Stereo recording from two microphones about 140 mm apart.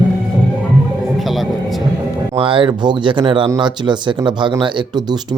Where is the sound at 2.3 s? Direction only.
40° right (ahead or behind).